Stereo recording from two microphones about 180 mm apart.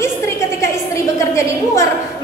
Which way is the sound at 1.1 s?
15° left (ahead or behind).